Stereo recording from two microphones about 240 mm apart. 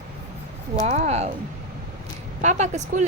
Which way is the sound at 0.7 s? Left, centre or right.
Right.